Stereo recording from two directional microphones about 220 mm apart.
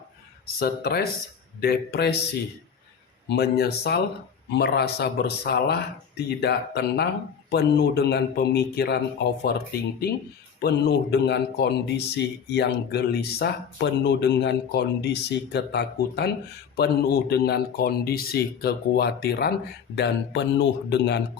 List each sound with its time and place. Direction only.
0.6 s speech: 45° left (ahead or behind)
3.2 s speech: 45° left (ahead or behind)
10.6 s speech: 50° left (ahead or behind)